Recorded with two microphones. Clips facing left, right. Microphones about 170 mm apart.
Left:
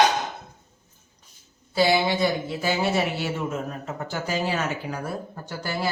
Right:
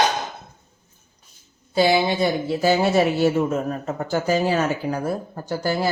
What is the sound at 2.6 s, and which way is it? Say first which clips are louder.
Speech: right 7 dB; 40° right (ahead or behind).